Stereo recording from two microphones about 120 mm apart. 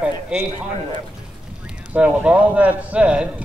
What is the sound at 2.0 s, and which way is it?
A man's voice, 10° right (ahead or behind).